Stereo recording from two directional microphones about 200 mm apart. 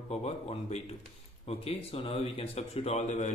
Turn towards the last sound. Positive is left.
turn(degrees=35)  # may be behind; listen again after turning